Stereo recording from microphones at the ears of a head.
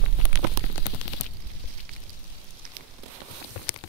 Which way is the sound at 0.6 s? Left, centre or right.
Left.